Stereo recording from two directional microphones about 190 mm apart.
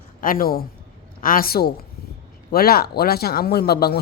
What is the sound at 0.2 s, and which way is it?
Speech, 50° left (ahead or behind).